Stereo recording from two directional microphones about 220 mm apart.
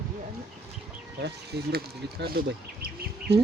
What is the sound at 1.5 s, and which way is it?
Speech, 50° right (ahead or behind).